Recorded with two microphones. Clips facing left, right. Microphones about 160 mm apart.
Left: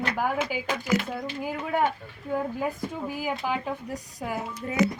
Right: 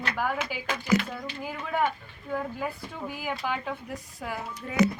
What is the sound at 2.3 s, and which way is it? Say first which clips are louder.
A woman's voice: left 3 dB; 15° left (ahead or behind).